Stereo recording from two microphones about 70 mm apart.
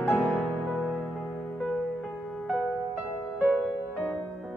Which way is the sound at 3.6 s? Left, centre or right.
Centre.